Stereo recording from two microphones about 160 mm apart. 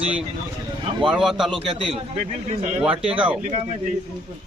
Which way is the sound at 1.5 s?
35° right (ahead or behind).